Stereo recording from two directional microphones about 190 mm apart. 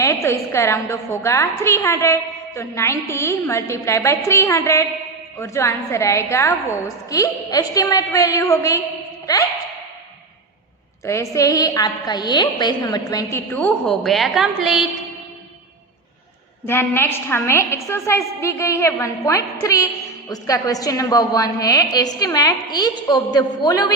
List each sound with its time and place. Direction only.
0.0 s a woman's voice: 15° left (ahead or behind)
11.0 s a woman's voice: 15° left (ahead or behind); by 14.8 s centre (ahead or behind)
16.6 s a woman's voice: 10° left (ahead or behind)